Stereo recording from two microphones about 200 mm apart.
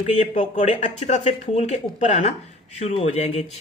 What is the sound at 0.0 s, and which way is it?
Speech, 35° left (ahead or behind).